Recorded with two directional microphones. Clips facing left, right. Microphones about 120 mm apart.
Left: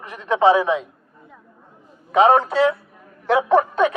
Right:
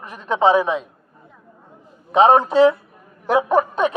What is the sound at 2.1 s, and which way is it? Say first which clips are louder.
A man's voice: right 1 dB; 20° right (ahead or behind).